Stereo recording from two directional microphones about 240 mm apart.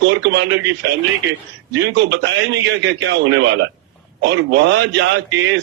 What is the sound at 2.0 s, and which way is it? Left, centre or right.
Speech, right.